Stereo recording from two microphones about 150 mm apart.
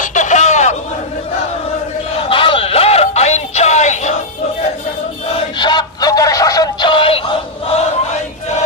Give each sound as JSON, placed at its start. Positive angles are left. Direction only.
{"t": 0.0, "sound": "a sound", "side_deg": 55}
{"t": 2.3, "sound": "music", "side_deg": 35}
{"t": 5.3, "sound": "synthetic singing", "side_deg": 30}